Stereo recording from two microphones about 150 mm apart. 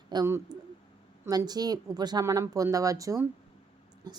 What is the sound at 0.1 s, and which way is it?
A woman's voice, 20° right (ahead or behind).